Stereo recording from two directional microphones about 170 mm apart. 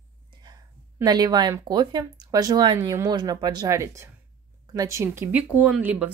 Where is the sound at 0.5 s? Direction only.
25° right (ahead or behind).